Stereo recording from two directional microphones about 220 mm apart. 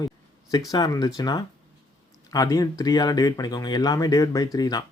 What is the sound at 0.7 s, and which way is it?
Speech, 20° left (ahead or behind).